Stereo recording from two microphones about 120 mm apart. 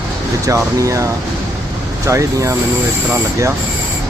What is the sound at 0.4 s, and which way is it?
Speech, 25° right (ahead or behind).